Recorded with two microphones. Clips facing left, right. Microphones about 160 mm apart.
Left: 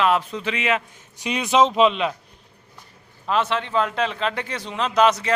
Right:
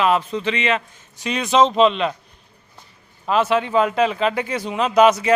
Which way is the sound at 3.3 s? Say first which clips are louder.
Right 4 dB; 5° right (ahead or behind).